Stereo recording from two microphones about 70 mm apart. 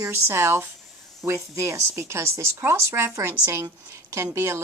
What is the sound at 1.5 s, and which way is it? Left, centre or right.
A woman's voice, right.